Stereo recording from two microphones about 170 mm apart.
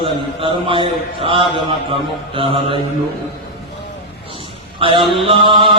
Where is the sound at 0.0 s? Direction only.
30° right (ahead or behind).